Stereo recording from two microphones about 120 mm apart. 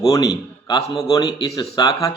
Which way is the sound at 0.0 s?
30° left (ahead or behind).